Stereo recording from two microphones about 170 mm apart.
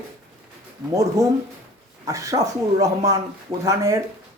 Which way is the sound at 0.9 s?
15° right (ahead or behind).